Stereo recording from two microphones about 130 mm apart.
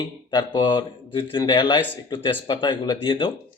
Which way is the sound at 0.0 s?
35° left (ahead or behind).